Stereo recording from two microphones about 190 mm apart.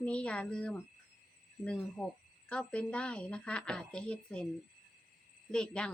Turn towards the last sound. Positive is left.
turn(degrees=5)  # may be behind; listen again after turning